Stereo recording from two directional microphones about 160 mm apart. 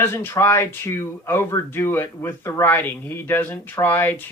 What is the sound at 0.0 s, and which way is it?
Speech, 15° left (ahead or behind).